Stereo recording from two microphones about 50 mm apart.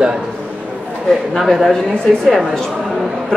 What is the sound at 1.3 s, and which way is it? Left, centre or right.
Speech, centre.